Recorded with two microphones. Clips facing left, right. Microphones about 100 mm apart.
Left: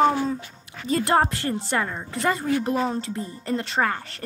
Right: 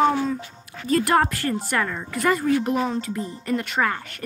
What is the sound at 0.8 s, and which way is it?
A woman's voice, 25° left (ahead or behind).